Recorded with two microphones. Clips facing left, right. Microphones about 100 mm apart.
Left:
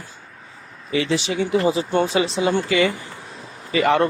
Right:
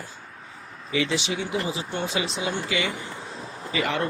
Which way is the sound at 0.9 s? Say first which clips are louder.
Left 4 dB; 40° left (ahead or behind).